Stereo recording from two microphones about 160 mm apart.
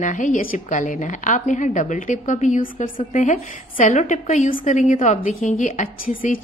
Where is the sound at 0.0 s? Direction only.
50° left (ahead or behind).